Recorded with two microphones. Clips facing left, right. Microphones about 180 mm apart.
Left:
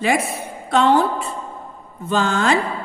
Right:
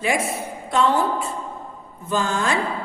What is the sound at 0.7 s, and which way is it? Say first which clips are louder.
Speech: left 4 dB; 75° left (ahead or behind).